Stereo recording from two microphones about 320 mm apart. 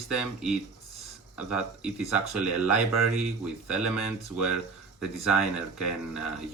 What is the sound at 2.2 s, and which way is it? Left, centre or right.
Speech, left.